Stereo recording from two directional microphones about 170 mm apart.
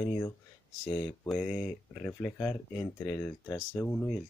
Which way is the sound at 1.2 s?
Centre (ahead or behind).